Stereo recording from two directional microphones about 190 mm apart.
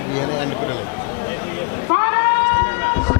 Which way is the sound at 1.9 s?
20° left (ahead or behind).